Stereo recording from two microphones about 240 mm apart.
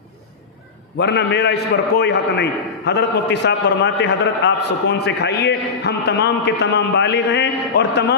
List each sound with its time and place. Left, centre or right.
0.9 s a man's voice: left